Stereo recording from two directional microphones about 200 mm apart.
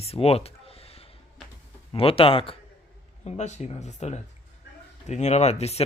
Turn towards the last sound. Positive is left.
turn(degrees=30)  # may be behind; listen again after turning